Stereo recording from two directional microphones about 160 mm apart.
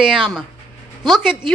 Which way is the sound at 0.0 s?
5° right (ahead or behind).